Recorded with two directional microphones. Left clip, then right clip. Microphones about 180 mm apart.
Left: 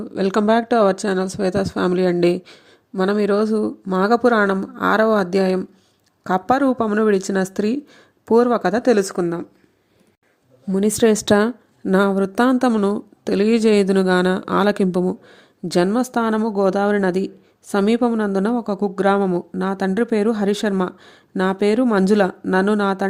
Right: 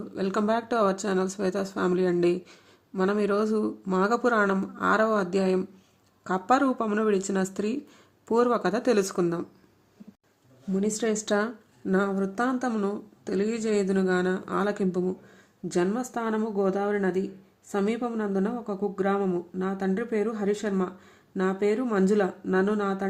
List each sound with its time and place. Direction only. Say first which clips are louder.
0.0 s speech: left 9 dB; 35° left (ahead or behind)
9.2 s speech: left 5 dB; 15° left (ahead or behind)
10.7 s a woman's voice: left 11 dB; 50° left (ahead or behind)